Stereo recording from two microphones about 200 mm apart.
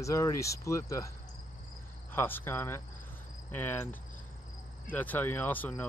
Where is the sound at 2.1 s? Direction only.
10° left (ahead or behind).